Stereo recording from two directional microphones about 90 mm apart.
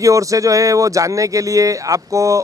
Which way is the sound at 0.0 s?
35° right (ahead or behind).